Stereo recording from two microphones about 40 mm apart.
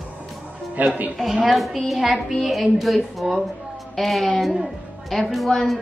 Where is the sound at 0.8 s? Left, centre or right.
Right.